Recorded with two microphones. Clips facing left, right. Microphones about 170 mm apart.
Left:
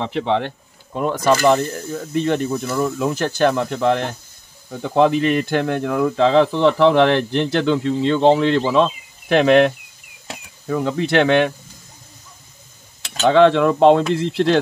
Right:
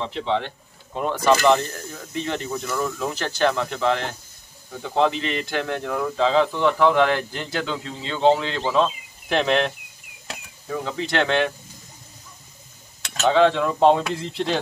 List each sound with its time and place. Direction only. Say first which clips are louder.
0.0 s speech: left 4 dB; 60° left (ahead or behind)
0.9 s speech: left 2 dB; 45° left (ahead or behind)
13.0 s a sound: left 4 dB; 30° left (ahead or behind)
13.3 s speech: left 5 dB; 70° left (ahead or behind)